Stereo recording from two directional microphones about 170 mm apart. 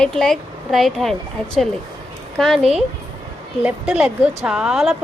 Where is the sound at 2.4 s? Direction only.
Centre (ahead or behind).